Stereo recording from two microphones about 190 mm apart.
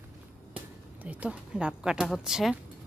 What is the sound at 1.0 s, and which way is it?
A woman's voice, 5° right (ahead or behind).